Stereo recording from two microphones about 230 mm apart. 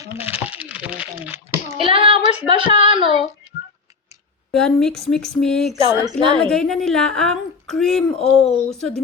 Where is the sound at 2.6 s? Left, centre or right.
Right.